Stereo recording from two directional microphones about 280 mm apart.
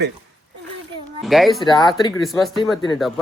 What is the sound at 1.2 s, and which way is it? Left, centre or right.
Speech, centre.